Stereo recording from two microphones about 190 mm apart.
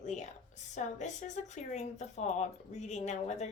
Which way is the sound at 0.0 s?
40° left (ahead or behind).